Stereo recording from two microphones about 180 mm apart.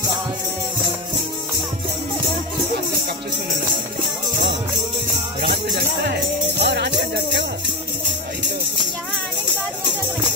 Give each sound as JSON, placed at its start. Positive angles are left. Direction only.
{"t": 6.6, "sound": "music", "side_deg": -70}